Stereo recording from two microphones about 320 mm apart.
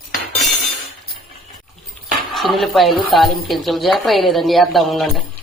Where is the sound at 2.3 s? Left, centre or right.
Centre.